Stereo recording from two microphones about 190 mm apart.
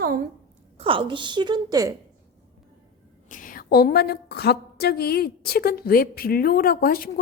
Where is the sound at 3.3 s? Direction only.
45° left (ahead or behind).